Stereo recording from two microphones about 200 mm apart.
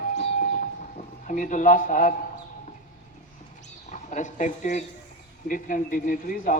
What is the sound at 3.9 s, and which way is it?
A man's voice, 35° left (ahead or behind).